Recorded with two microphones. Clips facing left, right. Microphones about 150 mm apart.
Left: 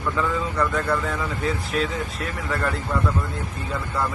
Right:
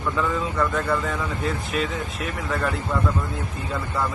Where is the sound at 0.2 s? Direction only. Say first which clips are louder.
Even; centre (ahead or behind).